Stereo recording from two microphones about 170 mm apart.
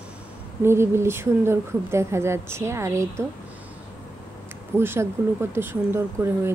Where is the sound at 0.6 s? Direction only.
15° right (ahead or behind).